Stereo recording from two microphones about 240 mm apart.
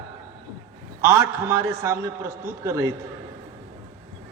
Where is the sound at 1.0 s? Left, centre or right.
Centre.